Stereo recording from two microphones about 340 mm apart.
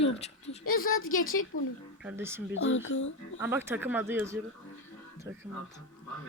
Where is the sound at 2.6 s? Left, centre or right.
Left.